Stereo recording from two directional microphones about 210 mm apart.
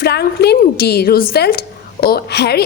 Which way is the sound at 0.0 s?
50° left (ahead or behind).